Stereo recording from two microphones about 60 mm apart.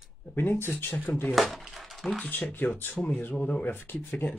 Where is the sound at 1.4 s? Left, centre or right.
Centre.